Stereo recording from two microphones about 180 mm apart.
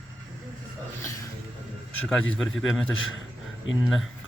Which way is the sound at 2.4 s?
Centre (ahead or behind).